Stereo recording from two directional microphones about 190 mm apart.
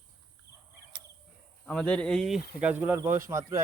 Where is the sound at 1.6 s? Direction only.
5° left (ahead or behind).